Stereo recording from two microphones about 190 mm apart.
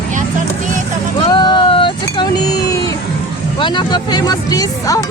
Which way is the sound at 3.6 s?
25° left (ahead or behind).